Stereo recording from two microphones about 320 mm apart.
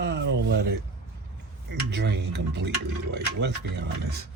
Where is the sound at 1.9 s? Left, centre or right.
Right.